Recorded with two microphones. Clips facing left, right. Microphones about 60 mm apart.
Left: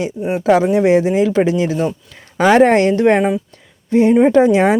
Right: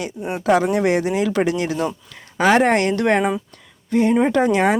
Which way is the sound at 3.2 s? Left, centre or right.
Centre.